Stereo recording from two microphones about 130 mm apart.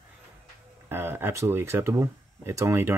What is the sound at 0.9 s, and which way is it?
Speech, 15° right (ahead or behind).